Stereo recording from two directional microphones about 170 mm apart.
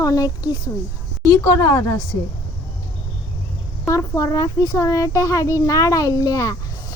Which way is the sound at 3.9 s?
20° left (ahead or behind).